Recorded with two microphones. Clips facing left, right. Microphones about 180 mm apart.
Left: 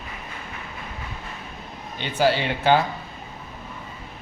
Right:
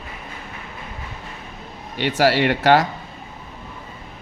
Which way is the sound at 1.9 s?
80° right.